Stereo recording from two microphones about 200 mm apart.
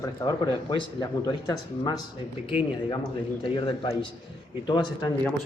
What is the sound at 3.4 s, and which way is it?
Speech, 25° left (ahead or behind).